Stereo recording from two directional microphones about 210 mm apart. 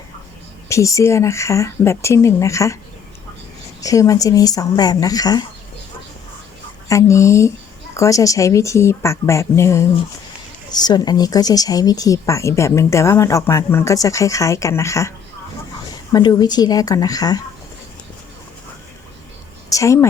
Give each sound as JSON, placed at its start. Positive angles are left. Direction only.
{"t": 0.7, "sound": "speech", "side_deg": 15}
{"t": 3.8, "sound": "speech", "side_deg": 15}
{"t": 6.8, "sound": "speech", "side_deg": 15}
{"t": 16.1, "sound": "speech", "side_deg": 20}
{"t": 19.7, "sound": "speech", "side_deg": 15}